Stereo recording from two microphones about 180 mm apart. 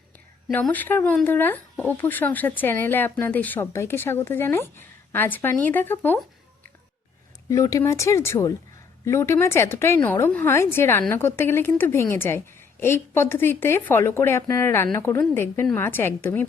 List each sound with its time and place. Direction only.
0.5 s speech: 10° left (ahead or behind)
7.5 s speech: 15° left (ahead or behind)